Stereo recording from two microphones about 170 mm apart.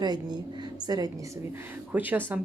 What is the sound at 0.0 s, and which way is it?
A woman's voice, 25° right (ahead or behind).